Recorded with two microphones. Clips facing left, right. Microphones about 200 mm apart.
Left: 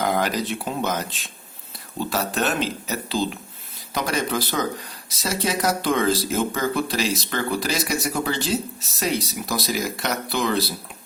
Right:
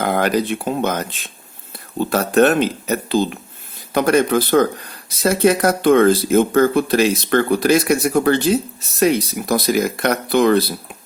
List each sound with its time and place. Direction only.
0.0 s speech: 55° right (ahead or behind)